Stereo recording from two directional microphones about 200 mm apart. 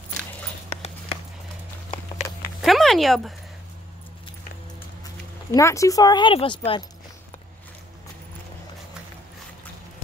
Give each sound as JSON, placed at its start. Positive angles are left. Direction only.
{"t": 2.6, "sound": "speech", "side_deg": 0}
{"t": 5.5, "sound": "speech", "side_deg": 15}